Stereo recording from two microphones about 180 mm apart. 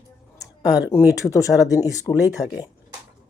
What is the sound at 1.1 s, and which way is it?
Speech, 20° left (ahead or behind).